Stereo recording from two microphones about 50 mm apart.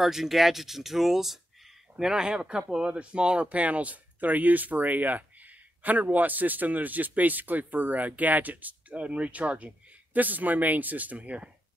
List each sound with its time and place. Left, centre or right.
0.0 s speech: centre; by 11.5 s right